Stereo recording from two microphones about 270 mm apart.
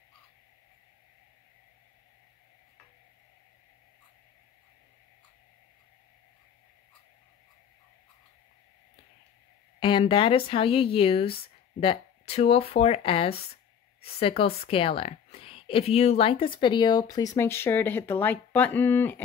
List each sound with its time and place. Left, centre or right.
9.8 s a woman's voice: centre